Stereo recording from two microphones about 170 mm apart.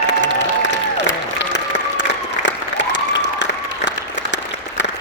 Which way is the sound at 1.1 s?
90° left.